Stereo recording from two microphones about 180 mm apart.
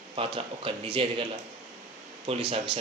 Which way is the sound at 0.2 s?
30° right (ahead or behind).